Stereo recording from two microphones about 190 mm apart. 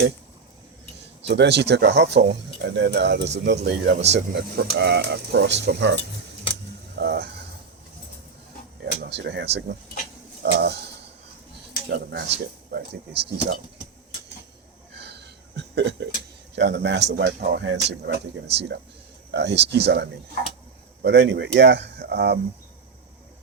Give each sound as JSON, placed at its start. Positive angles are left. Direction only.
{"t": 1.3, "sound": "speech", "side_deg": -65}
{"t": 8.8, "sound": "speech", "side_deg": -65}
{"t": 11.9, "sound": "speech", "side_deg": -65}
{"t": 14.9, "sound": "a sound", "side_deg": -60}
{"t": 16.6, "sound": "speech", "side_deg": -65}